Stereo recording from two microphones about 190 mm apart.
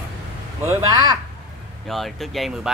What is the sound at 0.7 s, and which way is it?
Speech, 20° right (ahead or behind).